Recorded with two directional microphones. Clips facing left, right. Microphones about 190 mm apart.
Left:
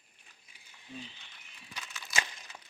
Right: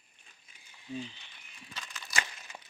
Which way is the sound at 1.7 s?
5° left (ahead or behind).